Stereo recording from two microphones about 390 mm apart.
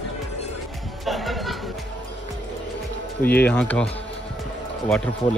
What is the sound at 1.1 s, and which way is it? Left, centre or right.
Chatter, centre.